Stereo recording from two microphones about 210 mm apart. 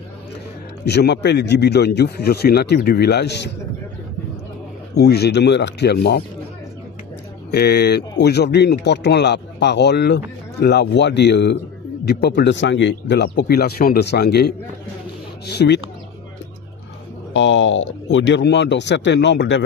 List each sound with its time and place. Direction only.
0.8 s speech: 50° left (ahead or behind)
4.9 s speech: 50° left (ahead or behind)
7.5 s speech: 50° left (ahead or behind)
17.3 s speech: 60° left (ahead or behind)